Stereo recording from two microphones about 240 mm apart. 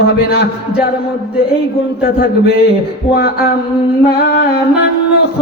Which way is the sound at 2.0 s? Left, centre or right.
Left.